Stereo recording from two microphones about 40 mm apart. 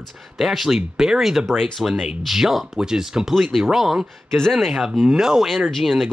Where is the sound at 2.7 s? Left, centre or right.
Centre.